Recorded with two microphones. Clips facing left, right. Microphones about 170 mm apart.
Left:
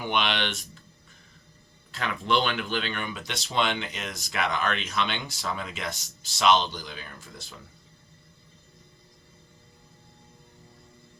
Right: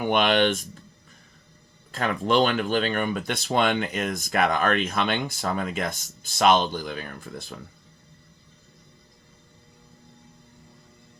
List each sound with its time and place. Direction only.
0.0 s speech: 50° right (ahead or behind)
1.9 s speech: 45° right (ahead or behind)